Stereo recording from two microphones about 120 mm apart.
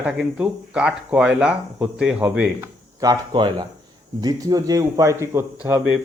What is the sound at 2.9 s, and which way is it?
A man's voice, 35° right (ahead or behind).